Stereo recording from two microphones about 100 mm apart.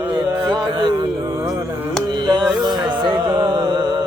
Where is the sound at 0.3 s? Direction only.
45° right (ahead or behind).